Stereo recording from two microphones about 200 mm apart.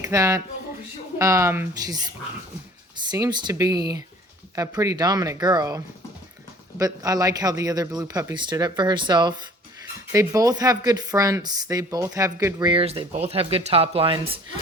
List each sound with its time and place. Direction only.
0.0 s speech: 15° right (ahead or behind)